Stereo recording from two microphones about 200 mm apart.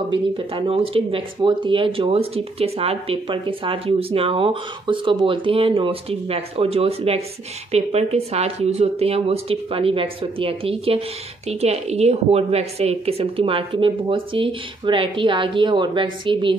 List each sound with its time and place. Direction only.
0.1 s speech: 25° right (ahead or behind)